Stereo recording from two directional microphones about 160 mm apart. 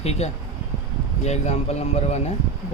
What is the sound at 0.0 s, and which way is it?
Speech, 40° left (ahead or behind).